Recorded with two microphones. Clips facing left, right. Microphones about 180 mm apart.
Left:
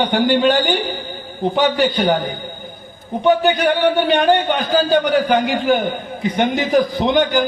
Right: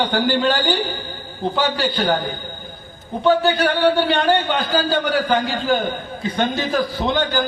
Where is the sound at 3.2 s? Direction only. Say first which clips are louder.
Left 2 dB; 20° left (ahead or behind).